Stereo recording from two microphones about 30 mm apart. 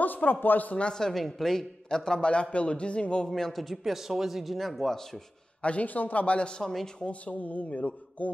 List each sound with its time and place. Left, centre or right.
0.0 s speech: left
1.1 s a woman's voice: centre
1.9 s a man's voice: left
2.5 s a man's voice: left
3.5 s speech: centre
4.6 s speech: centre
5.6 s speech: left
5.9 s mantra: left
6.2 s a man's voice: left
6.6 s a woman's voice: centre
7.0 s speech: left
7.3 s mantra: left